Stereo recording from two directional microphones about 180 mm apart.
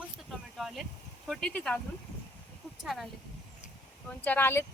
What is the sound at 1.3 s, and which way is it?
Speech, 5° left (ahead or behind).